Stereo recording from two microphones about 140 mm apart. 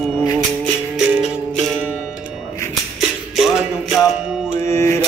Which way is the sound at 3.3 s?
Centre (ahead or behind).